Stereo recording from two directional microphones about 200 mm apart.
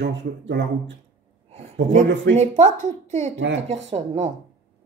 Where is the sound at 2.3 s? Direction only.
35° right (ahead or behind).